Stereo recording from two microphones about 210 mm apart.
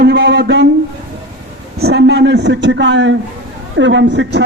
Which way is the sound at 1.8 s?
50° right (ahead or behind).